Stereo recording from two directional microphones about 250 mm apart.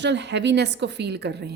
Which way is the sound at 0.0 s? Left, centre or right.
Right.